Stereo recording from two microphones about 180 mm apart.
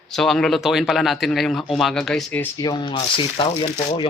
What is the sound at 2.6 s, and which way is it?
Speech, 25° left (ahead or behind).